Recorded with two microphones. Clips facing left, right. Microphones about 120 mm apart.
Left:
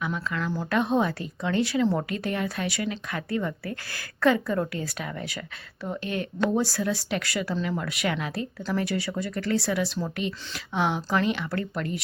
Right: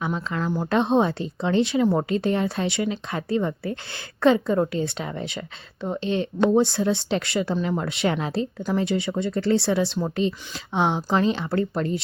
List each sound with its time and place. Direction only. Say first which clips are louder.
0.0 s speech: right 3 dB; 30° right (ahead or behind)